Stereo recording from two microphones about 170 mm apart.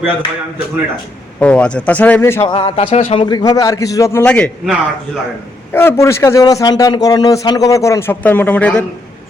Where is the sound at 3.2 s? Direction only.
25° left (ahead or behind); by 4.7 s 5° left (ahead or behind).